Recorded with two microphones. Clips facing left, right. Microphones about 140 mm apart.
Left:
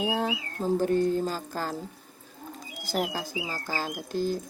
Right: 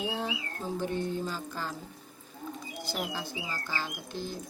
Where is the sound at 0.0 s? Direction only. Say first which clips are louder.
Left 5 dB; 45° left (ahead or behind).